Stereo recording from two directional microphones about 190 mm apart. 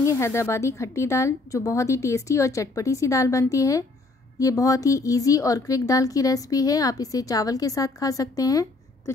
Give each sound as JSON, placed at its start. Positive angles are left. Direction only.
{"t": 0.0, "sound": "a woman's voice", "side_deg": 15}